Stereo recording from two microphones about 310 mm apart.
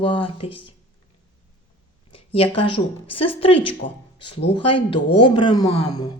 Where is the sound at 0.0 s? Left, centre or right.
Centre.